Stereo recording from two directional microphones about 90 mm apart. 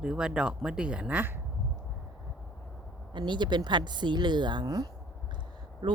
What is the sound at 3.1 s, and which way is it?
A woman's voice, 60° right (ahead or behind).